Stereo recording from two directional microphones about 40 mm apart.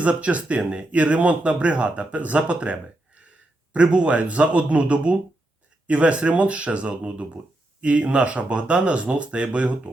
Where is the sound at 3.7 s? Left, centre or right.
Right.